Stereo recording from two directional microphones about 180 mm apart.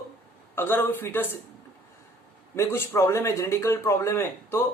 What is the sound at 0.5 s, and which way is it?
Speech, 10° left (ahead or behind).